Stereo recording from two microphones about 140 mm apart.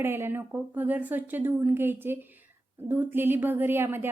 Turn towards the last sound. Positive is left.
turn(degrees=-15)  # may be behind; listen again after turning